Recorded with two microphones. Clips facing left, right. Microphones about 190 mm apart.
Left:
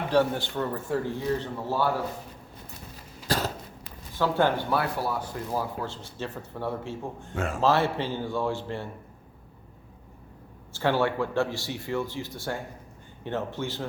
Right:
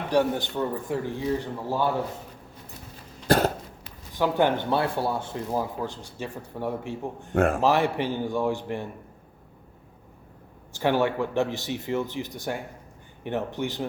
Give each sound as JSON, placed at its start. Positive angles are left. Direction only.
{"t": 0.1, "sound": "speech", "side_deg": -15}
{"t": 3.2, "sound": "cough", "side_deg": -55}
{"t": 4.1, "sound": "speech", "side_deg": -15}
{"t": 7.3, "sound": "a man's voice", "side_deg": -55}
{"t": 7.6, "sound": "speech", "side_deg": -15}
{"t": 10.7, "sound": "speech", "side_deg": -15}